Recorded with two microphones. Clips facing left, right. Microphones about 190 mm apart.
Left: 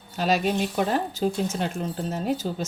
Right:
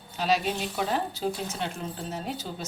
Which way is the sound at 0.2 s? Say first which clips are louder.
Left 3 dB; 45° left (ahead or behind).